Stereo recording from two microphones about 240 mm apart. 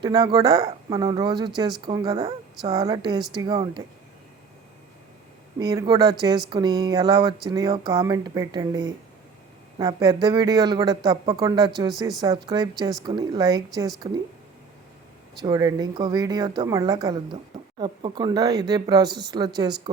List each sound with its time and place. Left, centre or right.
0.0 s speech: centre
5.5 s speech: centre
15.4 s speech: centre